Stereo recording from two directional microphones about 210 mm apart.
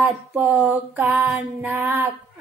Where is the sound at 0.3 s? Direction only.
5° right (ahead or behind).